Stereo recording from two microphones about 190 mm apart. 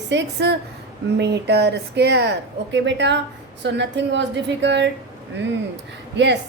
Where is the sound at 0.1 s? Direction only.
65° right (ahead or behind).